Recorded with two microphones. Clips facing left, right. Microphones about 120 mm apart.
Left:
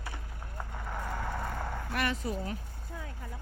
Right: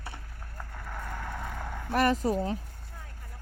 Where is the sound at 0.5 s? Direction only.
10° left (ahead or behind).